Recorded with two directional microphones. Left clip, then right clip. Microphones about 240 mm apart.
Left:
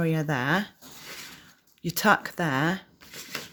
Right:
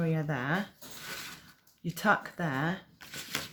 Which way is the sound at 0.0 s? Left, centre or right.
Left.